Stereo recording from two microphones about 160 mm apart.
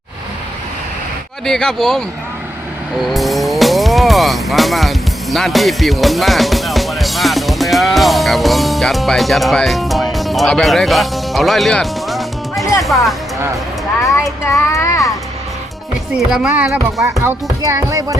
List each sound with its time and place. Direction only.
1.5 s speech: 5° left (ahead or behind)
14.4 s child singing: 20° left (ahead or behind)
16.1 s speech: 5° right (ahead or behind)
17.2 s speech: 20° right (ahead or behind)